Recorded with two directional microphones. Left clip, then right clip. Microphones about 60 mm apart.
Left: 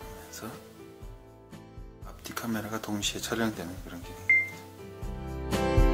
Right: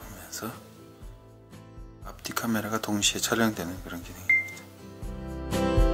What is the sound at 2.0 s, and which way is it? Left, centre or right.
Speech, right.